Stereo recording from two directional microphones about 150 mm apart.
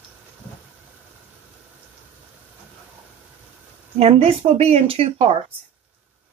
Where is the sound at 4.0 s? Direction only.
45° right (ahead or behind).